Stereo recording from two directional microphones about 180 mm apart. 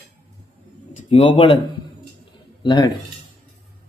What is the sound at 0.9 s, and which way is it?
Speech, 30° left (ahead or behind).